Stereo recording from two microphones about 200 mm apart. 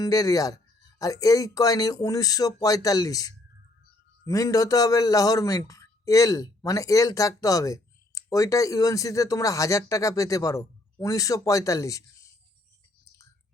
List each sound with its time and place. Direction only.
0.0 s a man's voice: 20° left (ahead or behind)